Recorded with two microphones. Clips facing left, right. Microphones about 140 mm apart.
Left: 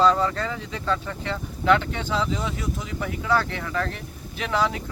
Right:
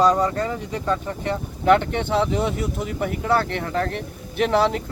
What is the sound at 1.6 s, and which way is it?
Speech, 50° right (ahead or behind).